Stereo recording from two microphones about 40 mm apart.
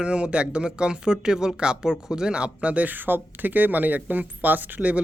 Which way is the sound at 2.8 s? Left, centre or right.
Right.